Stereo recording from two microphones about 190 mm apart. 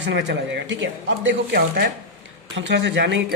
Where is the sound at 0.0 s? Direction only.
70° right (ahead or behind); by 1.9 s 50° right (ahead or behind).